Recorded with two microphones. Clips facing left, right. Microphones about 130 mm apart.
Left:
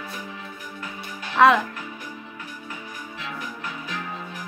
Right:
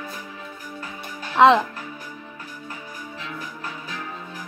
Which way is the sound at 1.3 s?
25° right (ahead or behind).